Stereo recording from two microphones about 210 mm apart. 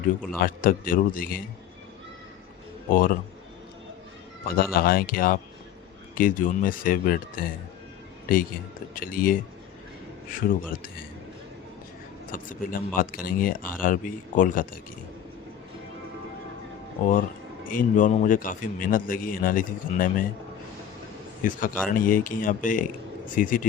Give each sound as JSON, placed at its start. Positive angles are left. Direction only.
{"t": 0.4, "sound": "a man's voice", "side_deg": 40}
{"t": 2.9, "sound": "a man's voice", "side_deg": 40}
{"t": 4.4, "sound": "a man's voice", "side_deg": 45}
{"t": 12.3, "sound": "a man's voice", "side_deg": 40}
{"t": 17.1, "sound": "a man's voice", "side_deg": 40}
{"t": 21.4, "sound": "a man's voice", "side_deg": 40}